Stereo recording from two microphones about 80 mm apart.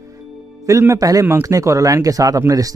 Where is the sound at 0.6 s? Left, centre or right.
Right.